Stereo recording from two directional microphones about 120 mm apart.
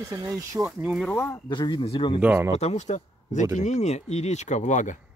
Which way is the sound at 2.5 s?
65° left (ahead or behind).